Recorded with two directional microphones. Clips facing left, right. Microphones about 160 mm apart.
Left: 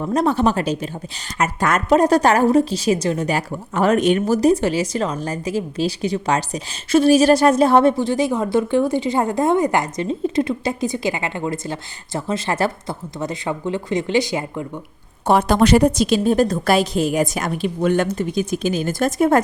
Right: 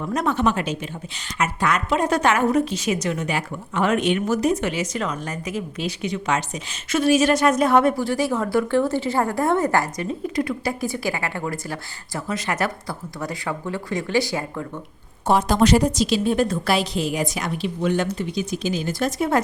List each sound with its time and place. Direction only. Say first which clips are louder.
0.0 s a woman's voice: left 4 dB; 30° left (ahead or behind)
15.3 s a woman's voice: left 3 dB; 60° left (ahead or behind)